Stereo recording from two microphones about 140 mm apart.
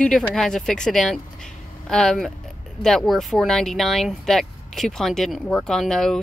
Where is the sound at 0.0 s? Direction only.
5° left (ahead or behind).